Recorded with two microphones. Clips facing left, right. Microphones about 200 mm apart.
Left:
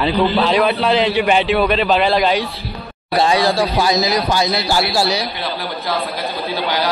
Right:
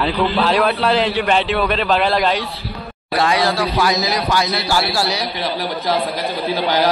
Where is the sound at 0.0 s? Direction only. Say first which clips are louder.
Left 2 dB; 5° left (ahead or behind).